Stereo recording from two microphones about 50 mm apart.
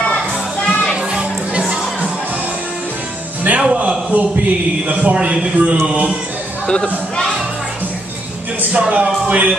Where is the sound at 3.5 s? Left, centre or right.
Right.